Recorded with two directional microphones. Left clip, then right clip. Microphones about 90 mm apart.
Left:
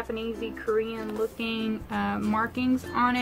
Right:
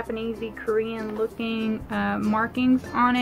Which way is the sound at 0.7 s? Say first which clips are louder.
Right 2 dB; 55° left (ahead or behind).